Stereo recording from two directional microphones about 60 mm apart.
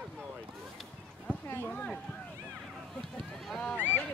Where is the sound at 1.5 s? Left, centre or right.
Left.